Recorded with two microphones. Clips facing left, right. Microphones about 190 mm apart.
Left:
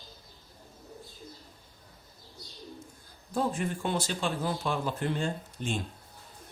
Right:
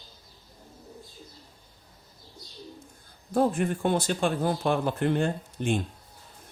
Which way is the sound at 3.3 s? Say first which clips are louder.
Right 6 dB; 55° right (ahead or behind).